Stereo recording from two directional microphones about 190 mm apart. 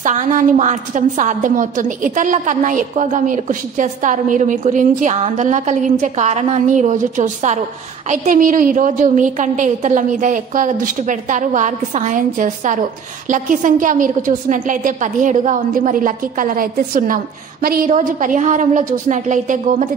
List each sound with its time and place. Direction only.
0.0 s a woman's voice: 40° right (ahead or behind)